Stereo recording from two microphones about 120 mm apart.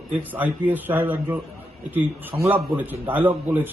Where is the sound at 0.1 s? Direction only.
15° right (ahead or behind).